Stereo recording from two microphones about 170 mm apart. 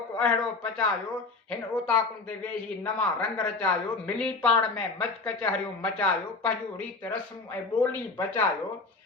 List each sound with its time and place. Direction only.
0.2 s a man's voice: 5° left (ahead or behind)